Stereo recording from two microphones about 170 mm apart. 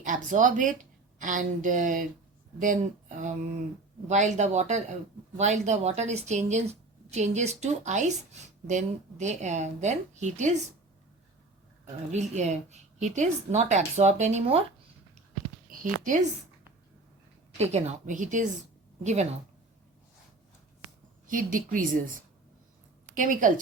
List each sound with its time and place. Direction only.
0.0 s a woman's voice: 50° right (ahead or behind)
12.1 s a woman's voice: 40° right (ahead or behind)
15.7 s a woman's voice: 50° right (ahead or behind)
17.6 s a woman's voice: 40° right (ahead or behind)
21.2 s a woman's voice: 50° right (ahead or behind)